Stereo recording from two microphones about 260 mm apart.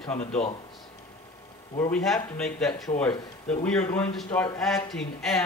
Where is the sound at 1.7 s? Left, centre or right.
Centre.